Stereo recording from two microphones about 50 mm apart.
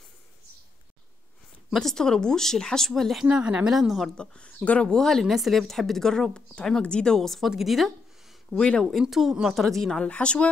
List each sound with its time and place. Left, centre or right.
1.7 s speech: centre
3.3 s speech: right
3.7 s speech: centre
4.2 s speech: left
4.8 s speech: centre
5.2 s speech: centre
7.4 s a sound: centre
8.5 s speech: centre
9.0 s a woman's voice: centre
9.7 s speech: centre
10.0 s speech: left